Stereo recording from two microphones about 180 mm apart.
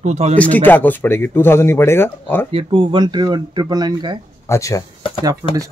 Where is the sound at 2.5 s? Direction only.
30° right (ahead or behind).